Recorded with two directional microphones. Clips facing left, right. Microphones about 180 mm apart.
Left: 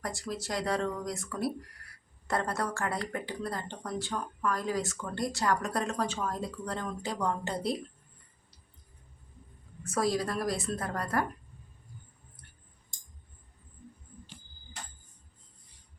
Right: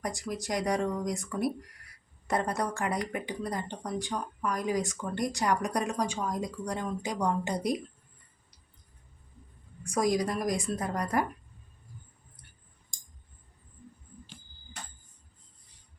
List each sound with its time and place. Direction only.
0.0 s speech: 15° right (ahead or behind)
9.8 s speech: 15° right (ahead or behind)